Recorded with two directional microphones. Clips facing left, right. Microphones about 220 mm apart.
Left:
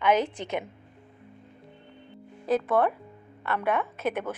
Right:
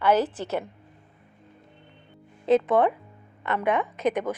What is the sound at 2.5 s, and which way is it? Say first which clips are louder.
A woman's voice: right 4 dB; 20° right (ahead or behind).